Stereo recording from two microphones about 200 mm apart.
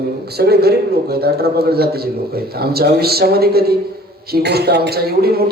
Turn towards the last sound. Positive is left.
turn(degrees=-50)  # may be behind; listen again after turning